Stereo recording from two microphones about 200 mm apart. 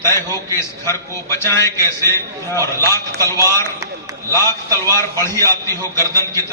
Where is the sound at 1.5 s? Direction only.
15° left (ahead or behind).